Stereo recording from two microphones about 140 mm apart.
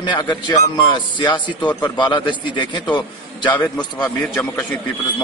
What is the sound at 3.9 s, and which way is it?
Speech, 10° left (ahead or behind).